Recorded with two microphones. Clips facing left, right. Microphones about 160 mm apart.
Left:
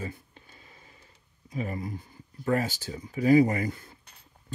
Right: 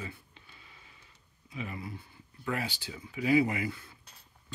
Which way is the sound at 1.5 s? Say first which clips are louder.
Left 6 dB; 40° left (ahead or behind).